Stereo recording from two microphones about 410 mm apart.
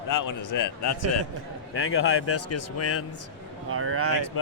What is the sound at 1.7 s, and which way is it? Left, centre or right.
Speech, left.